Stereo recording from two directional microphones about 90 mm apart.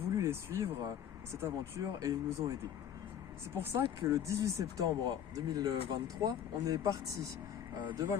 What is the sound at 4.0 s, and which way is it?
Speech, 35° right (ahead or behind).